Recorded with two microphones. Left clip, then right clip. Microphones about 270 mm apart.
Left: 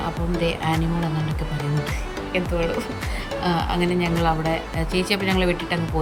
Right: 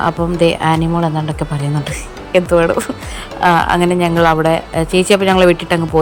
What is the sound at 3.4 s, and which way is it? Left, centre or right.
Speech, centre.